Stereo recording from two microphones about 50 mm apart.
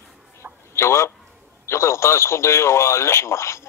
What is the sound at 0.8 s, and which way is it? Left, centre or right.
A man's voice, left.